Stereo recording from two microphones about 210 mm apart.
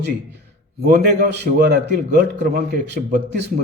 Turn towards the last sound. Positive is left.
turn(degrees=-55)  # may be behind; listen again after turning